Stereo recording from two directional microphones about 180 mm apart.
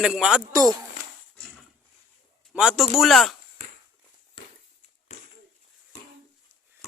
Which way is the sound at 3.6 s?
40° right (ahead or behind).